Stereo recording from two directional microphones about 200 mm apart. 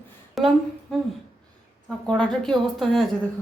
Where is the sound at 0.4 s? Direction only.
Centre (ahead or behind).